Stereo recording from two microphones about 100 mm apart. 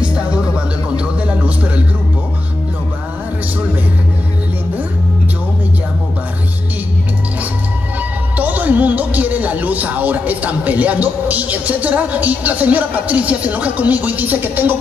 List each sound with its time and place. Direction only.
0.0 s music: 10° right (ahead or behind)
8.4 s speech: 15° right (ahead or behind)